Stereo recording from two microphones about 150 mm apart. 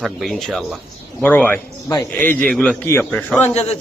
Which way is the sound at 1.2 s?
10° left (ahead or behind).